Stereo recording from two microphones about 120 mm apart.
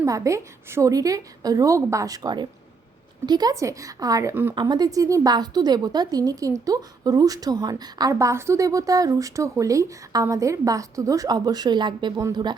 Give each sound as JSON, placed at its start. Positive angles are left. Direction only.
{"t": 0.0, "sound": "a woman's voice", "side_deg": -25}
{"t": 4.5, "sound": "a woman's voice", "side_deg": -35}